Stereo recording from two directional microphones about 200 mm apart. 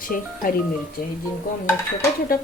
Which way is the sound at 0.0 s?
45° left (ahead or behind).